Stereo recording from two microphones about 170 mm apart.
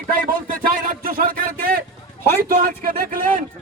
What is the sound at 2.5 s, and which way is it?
Speech, 55° right (ahead or behind).